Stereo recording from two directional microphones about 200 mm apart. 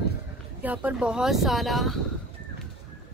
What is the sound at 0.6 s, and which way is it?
Speech, 10° right (ahead or behind).